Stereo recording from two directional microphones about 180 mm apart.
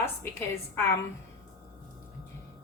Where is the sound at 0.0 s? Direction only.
15° left (ahead or behind).